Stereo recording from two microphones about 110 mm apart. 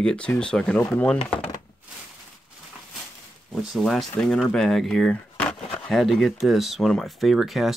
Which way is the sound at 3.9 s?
5° left (ahead or behind).